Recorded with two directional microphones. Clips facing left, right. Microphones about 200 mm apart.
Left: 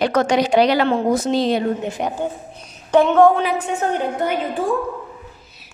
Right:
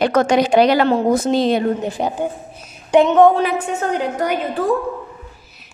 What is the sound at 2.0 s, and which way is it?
Speech, 30° right (ahead or behind).